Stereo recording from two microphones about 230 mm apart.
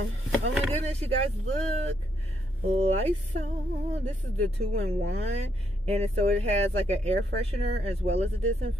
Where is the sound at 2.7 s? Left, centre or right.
Right.